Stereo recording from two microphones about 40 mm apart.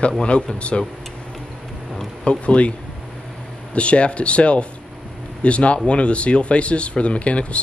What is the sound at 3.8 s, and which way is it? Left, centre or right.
Speech, left.